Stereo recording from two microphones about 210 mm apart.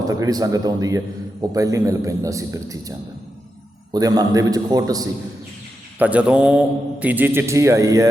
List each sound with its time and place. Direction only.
0.0 s a man's voice: 15° right (ahead or behind)
3.9 s a man's voice: 15° right (ahead or behind)
6.0 s a man's voice: 5° right (ahead or behind)